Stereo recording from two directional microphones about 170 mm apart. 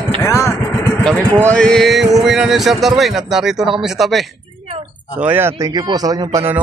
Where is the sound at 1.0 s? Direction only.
5° left (ahead or behind).